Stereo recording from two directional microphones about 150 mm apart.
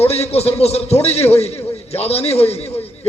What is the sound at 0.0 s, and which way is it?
A man's voice, 45° left (ahead or behind).